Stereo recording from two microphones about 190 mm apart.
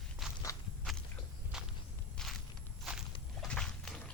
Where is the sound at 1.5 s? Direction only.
5° right (ahead or behind).